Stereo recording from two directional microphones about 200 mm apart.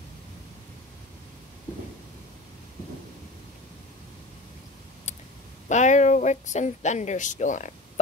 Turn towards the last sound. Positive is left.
turn(degrees=40)  # may be behind; listen again after turning